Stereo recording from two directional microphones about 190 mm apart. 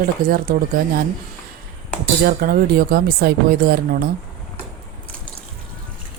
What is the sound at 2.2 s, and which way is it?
Speech, 50° right (ahead or behind).